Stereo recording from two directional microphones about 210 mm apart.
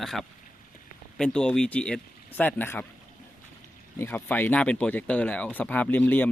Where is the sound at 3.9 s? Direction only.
10° left (ahead or behind).